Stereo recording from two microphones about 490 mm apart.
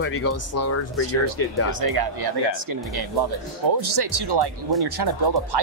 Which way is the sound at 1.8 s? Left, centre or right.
Right.